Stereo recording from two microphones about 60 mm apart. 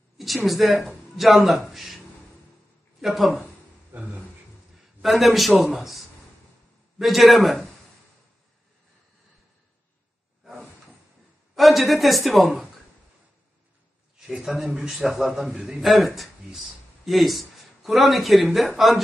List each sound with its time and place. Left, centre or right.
0.2 s speech: centre
3.0 s speech: centre
3.9 s speech: right
5.0 s a man's voice: centre
11.5 s a man's voice: centre
14.2 s a man's voice: centre